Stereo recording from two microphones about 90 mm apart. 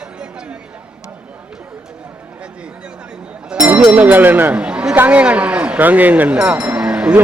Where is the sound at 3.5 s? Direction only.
10° right (ahead or behind).